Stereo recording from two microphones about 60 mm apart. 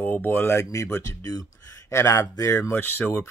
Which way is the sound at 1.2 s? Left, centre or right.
Left.